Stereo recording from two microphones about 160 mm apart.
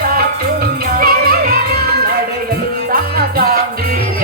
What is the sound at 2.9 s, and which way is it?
Music, 70° right (ahead or behind).